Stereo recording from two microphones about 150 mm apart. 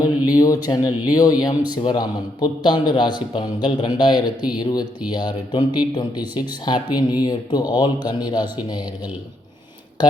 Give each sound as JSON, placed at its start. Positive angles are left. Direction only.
{"t": 0.3, "sound": "speech", "side_deg": 25}